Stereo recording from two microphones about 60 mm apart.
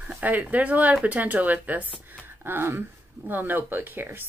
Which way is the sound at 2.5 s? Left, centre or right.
Right.